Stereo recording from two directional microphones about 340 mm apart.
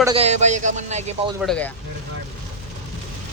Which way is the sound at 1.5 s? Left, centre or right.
Centre.